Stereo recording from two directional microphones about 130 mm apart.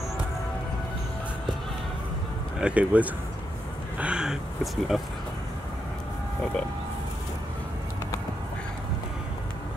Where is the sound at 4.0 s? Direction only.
5° right (ahead or behind).